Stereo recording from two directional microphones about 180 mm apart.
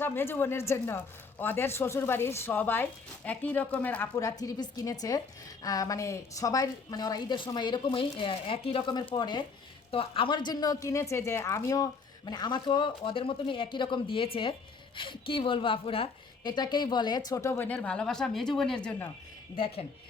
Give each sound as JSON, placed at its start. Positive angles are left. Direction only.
{"t": 0.0, "sound": "a woman's voice", "side_deg": 10}
{"t": 19.5, "sound": "a woman's voice", "side_deg": 30}